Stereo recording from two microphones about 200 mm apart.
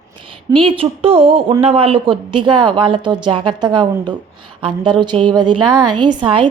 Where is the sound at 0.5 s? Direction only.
25° right (ahead or behind).